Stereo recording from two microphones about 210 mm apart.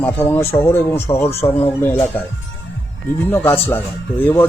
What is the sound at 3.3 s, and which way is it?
Speech, 10° left (ahead or behind).